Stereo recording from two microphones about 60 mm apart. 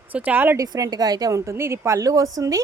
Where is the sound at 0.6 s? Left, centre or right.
Right.